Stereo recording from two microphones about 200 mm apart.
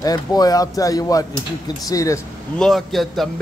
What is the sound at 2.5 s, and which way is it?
Speech, centre (ahead or behind).